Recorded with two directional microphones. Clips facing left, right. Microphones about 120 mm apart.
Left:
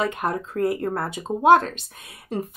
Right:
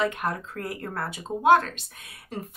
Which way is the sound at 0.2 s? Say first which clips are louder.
Left 7 dB; 25° left (ahead or behind).